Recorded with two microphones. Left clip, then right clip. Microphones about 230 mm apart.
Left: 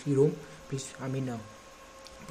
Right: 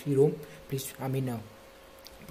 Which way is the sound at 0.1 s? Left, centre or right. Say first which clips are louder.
Right 1 dB; centre.